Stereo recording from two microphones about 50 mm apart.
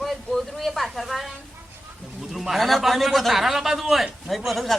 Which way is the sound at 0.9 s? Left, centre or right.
Centre.